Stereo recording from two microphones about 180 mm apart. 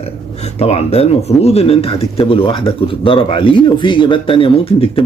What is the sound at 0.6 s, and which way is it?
Speech, 35° left (ahead or behind).